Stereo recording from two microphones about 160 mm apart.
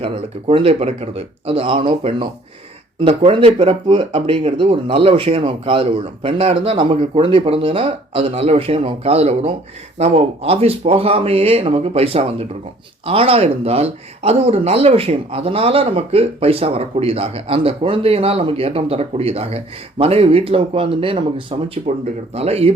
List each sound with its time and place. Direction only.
0.0 s speech: 35° right (ahead or behind)